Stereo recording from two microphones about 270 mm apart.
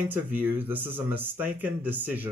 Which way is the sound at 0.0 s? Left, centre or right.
Centre.